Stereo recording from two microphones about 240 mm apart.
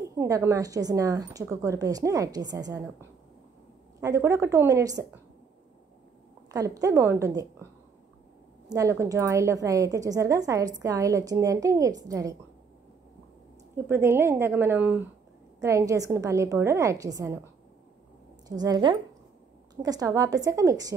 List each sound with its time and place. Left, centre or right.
0.1 s a woman's voice: centre
6.5 s a woman's voice: centre
8.7 s a woman's voice: centre
13.8 s a woman's voice: centre
18.6 s a woman's voice: centre